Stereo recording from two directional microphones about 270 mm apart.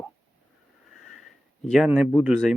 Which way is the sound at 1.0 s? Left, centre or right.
Centre.